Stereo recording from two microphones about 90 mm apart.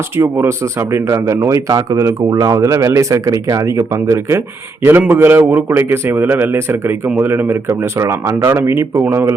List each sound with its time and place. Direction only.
0.2 s a man's voice: 25° right (ahead or behind)